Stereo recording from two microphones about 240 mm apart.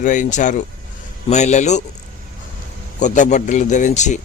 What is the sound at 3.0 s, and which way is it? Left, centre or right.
A man's voice, left.